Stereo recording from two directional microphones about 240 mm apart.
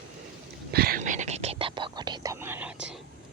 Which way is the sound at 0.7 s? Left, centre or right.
Right.